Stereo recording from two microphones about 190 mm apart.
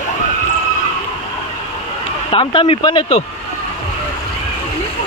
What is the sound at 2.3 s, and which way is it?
Speech, 25° left (ahead or behind).